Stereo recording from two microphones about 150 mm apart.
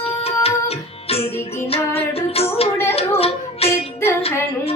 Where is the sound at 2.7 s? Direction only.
15° left (ahead or behind).